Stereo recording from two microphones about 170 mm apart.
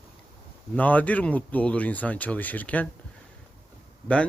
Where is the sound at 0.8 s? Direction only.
10° left (ahead or behind).